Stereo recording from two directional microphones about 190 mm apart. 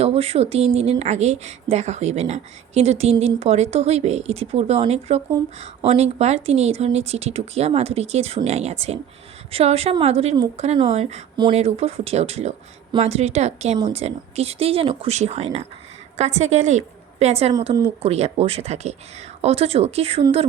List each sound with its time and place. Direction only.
0.0 s a woman's voice: 30° right (ahead or behind)